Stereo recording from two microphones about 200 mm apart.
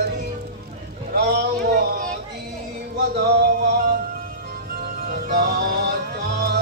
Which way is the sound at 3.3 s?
50° right (ahead or behind).